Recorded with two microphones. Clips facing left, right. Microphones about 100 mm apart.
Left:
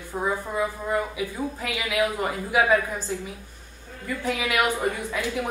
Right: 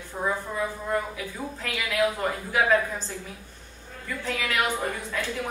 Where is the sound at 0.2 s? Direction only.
15° left (ahead or behind).